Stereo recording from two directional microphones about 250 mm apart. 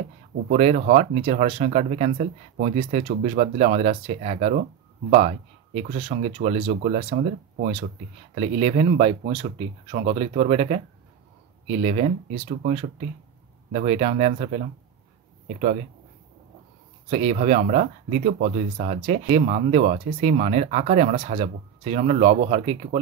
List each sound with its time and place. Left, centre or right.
0.5 s speech: right
5.8 s speech: right
8.4 s speech: right
17.1 s speech: right